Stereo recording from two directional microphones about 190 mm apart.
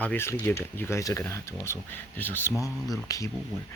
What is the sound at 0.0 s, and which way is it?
Speech, 10° left (ahead or behind).